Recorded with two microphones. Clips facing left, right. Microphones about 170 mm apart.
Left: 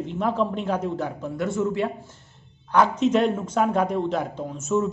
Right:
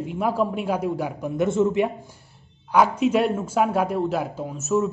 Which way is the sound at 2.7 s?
10° right (ahead or behind).